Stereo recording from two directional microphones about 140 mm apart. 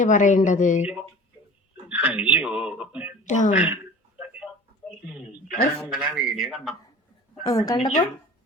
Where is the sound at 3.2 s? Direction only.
60° left (ahead or behind).